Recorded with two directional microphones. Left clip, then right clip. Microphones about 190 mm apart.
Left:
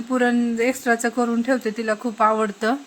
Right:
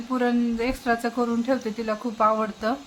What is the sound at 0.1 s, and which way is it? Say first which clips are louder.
Speech: left 4 dB; 15° left (ahead or behind).